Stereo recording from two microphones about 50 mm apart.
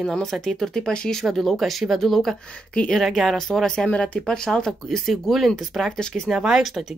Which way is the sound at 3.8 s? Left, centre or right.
Left.